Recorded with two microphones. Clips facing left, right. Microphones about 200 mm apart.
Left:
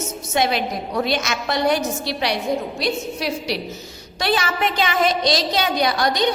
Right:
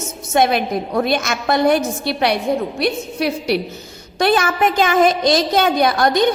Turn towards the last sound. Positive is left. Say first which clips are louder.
# right 4 dB
turn(degrees=-50)  # may be behind; listen again after turning